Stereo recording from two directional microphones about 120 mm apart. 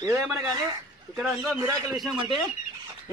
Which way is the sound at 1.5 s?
25° right (ahead or behind).